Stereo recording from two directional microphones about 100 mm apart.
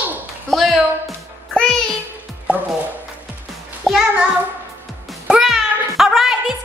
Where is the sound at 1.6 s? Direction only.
5° left (ahead or behind).